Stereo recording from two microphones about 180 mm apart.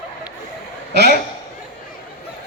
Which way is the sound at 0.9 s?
65° right (ahead or behind).